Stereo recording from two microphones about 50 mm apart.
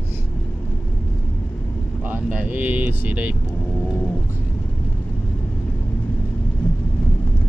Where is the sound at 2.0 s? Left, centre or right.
Right.